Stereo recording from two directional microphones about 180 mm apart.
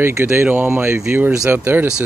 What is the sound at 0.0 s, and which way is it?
Speech, 15° right (ahead or behind).